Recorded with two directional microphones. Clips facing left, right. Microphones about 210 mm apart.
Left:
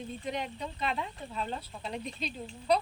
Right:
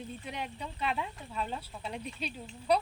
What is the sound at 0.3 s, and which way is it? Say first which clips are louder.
Speech: left 6 dB; 5° right (ahead or behind).